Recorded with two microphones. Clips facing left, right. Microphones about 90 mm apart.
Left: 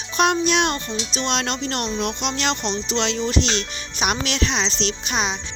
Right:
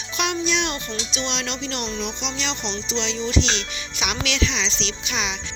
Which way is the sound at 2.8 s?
55° left (ahead or behind).